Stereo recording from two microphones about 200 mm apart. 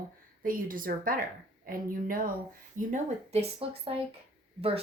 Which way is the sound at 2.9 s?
30° right (ahead or behind).